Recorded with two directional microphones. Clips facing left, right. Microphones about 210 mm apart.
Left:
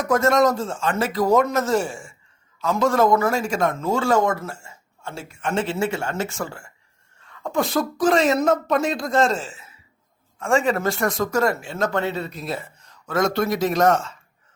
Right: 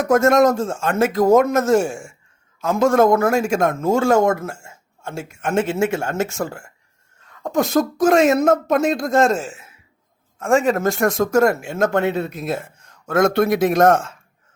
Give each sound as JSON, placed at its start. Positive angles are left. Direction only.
{"t": 0.1, "sound": "a man's voice", "side_deg": -50}